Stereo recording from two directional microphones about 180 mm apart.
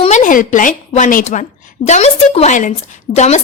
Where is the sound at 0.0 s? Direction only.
45° left (ahead or behind).